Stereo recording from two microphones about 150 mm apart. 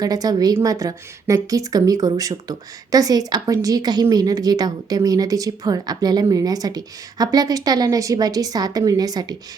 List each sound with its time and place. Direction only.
0.0 s a woman's voice: 25° right (ahead or behind)